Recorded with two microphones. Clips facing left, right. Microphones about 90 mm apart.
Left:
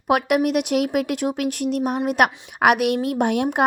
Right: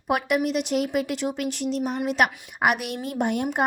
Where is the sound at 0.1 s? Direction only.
60° left (ahead or behind).